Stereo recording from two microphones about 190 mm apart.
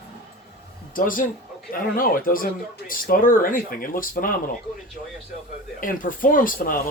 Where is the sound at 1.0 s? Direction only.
45° left (ahead or behind).